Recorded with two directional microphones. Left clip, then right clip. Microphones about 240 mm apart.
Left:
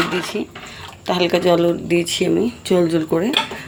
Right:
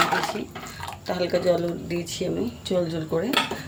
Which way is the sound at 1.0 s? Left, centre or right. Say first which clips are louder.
Left 6 dB; left.